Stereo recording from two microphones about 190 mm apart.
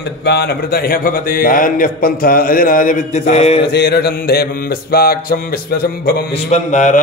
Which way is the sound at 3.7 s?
60° left (ahead or behind).